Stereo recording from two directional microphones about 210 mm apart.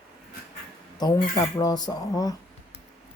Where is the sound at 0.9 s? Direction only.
15° left (ahead or behind).